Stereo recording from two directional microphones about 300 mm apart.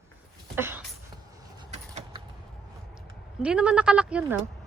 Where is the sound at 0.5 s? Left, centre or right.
Centre.